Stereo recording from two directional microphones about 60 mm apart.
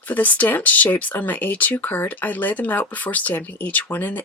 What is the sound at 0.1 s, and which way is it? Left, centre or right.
Speech, left.